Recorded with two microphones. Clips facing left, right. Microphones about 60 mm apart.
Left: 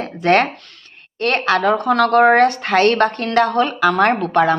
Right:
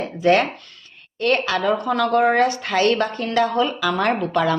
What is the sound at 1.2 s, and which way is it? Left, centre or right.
Speech, left.